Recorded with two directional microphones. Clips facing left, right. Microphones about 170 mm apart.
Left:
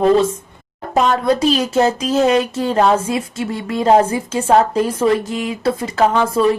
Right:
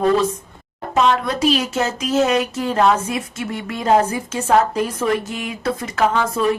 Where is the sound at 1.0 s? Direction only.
40° left (ahead or behind).